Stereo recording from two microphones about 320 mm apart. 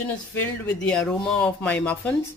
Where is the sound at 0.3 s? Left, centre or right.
Centre.